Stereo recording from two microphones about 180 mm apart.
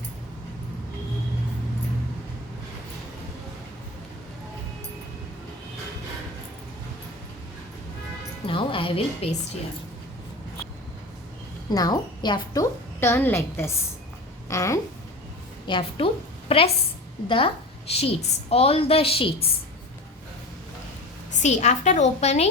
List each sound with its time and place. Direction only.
8.4 s music: 30° left (ahead or behind)
11.7 s a woman's voice: 20° left (ahead or behind)
13.0 s a woman's voice: 10° left (ahead or behind)
15.6 s a woman's voice: 25° left (ahead or behind)
21.3 s a woman's voice: 40° left (ahead or behind)